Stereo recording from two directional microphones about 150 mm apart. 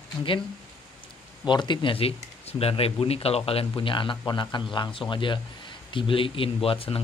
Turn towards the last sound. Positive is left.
turn(degrees=40)  # may be behind; listen again after turning